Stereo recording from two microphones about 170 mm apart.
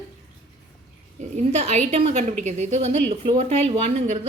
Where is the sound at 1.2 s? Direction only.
40° right (ahead or behind).